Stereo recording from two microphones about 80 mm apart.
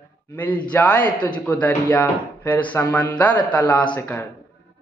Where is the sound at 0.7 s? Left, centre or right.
Centre.